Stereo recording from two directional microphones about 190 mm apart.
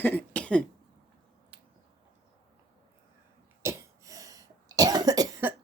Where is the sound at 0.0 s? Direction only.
10° left (ahead or behind).